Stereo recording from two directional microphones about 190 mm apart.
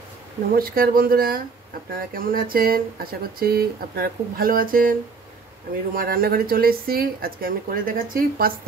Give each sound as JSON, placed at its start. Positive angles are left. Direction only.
{"t": 0.6, "sound": "speech", "side_deg": -50}
{"t": 5.9, "sound": "speech", "side_deg": -50}